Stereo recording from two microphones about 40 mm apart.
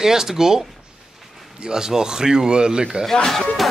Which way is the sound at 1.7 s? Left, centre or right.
Centre.